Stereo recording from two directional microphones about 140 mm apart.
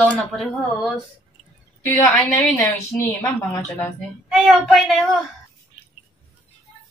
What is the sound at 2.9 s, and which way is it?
Speech, 20° left (ahead or behind).